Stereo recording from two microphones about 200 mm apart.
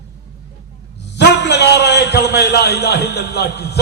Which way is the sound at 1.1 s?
60° left (ahead or behind).